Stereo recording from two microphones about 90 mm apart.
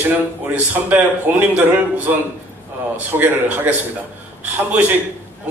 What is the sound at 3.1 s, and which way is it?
Speech, 20° right (ahead or behind).